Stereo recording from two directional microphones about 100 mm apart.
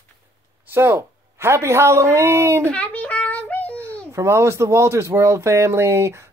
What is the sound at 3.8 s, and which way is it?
Speech, 30° right (ahead or behind).